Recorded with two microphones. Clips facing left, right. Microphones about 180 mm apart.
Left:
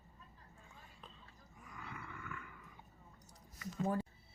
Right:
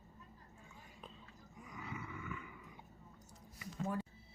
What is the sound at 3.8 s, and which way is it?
Music, 35° left (ahead or behind).